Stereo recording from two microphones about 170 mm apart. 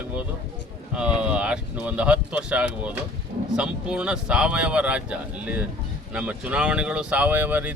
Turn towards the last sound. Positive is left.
turn(degrees=-10)  # may be behind; listen again after turning